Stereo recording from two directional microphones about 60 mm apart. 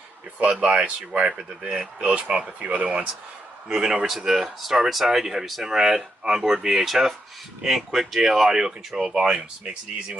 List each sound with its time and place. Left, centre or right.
0.6 s speech: centre